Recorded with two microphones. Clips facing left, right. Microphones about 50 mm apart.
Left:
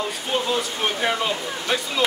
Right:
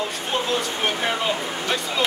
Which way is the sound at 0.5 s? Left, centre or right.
Centre.